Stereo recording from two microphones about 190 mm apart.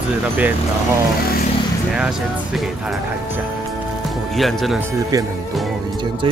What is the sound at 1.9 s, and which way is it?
Speech, 5° right (ahead or behind).